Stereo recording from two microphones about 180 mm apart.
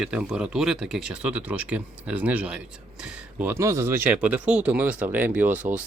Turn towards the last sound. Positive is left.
turn(degrees=-10)  # may be behind; listen again after turning